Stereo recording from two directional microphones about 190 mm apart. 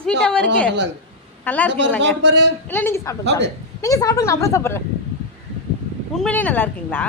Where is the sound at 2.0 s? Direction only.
65° right (ahead or behind).